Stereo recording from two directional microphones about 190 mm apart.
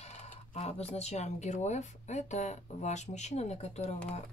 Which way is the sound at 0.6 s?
35° left (ahead or behind).